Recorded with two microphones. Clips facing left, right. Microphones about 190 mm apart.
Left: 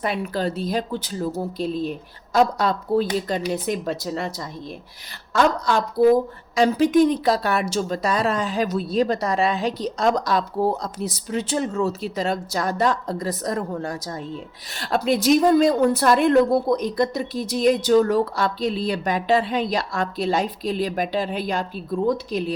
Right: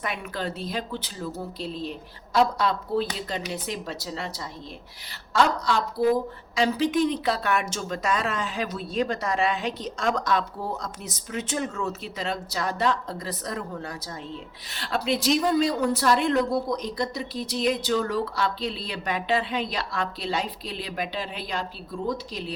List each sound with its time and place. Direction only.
0.0 s a woman's voice: 35° left (ahead or behind); by 4.3 s 50° left (ahead or behind)
5.3 s a woman's voice: 50° left (ahead or behind)